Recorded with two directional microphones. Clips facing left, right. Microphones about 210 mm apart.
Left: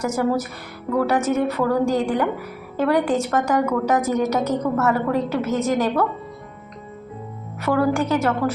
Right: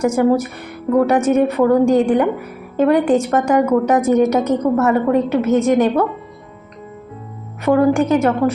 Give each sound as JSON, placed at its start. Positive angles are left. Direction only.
{"t": 0.0, "sound": "a woman's voice", "side_deg": -25}
{"t": 3.2, "sound": "a woman's voice", "side_deg": -30}
{"t": 7.6, "sound": "a woman's voice", "side_deg": -25}